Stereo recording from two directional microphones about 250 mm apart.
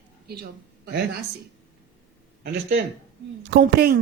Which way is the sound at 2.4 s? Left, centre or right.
Right.